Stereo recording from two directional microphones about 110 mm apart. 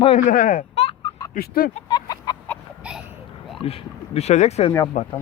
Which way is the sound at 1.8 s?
40° left (ahead or behind).